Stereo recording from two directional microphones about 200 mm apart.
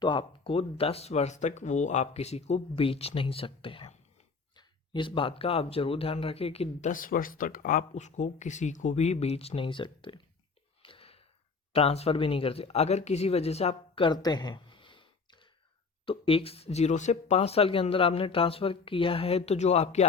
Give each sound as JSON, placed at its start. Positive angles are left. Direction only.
{"t": 0.0, "sound": "speech", "side_deg": 25}
{"t": 10.8, "sound": "a sound", "side_deg": 25}
{"t": 11.7, "sound": "speech", "side_deg": 30}